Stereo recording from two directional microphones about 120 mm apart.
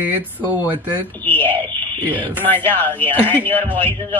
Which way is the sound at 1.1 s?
15° left (ahead or behind).